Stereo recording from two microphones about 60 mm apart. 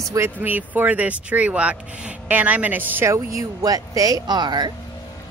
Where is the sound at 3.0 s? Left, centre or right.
Right.